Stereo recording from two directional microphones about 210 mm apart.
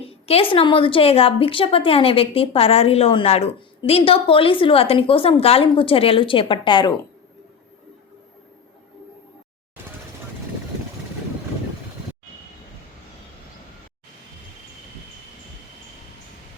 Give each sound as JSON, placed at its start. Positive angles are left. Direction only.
{"t": 0.0, "sound": "a woman's voice", "side_deg": 30}